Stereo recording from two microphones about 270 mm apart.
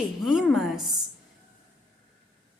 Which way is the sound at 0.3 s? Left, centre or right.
Centre.